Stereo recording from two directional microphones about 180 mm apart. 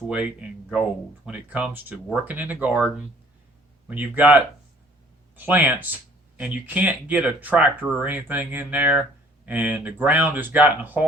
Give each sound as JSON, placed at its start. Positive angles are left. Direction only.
{"t": 0.7, "sound": "speech", "side_deg": -5}
{"t": 3.8, "sound": "speech", "side_deg": -10}